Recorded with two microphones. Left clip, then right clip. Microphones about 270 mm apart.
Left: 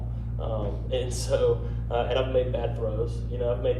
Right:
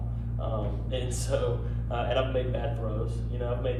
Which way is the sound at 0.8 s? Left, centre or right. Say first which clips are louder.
Left 6 dB; left.